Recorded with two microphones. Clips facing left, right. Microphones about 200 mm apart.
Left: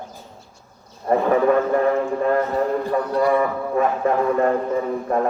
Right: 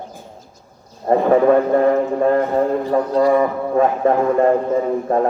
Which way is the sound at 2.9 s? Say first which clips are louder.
Right 5 dB; 30° right (ahead or behind).